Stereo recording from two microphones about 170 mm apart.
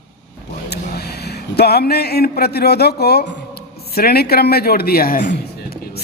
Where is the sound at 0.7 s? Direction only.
70° left (ahead or behind).